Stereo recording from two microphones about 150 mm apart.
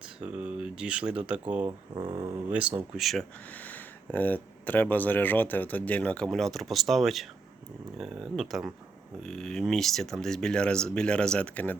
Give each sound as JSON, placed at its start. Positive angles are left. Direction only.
{"t": 0.2, "sound": "speech", "side_deg": -10}
{"t": 2.0, "sound": "speech", "side_deg": -30}
{"t": 2.5, "sound": "speech", "side_deg": -5}
{"t": 3.6, "sound": "speech", "side_deg": 10}